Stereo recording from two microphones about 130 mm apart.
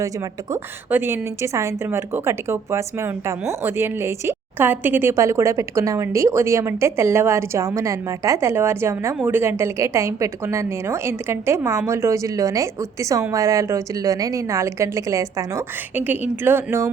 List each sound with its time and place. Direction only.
0.5 s a woman's voice: 15° right (ahead or behind)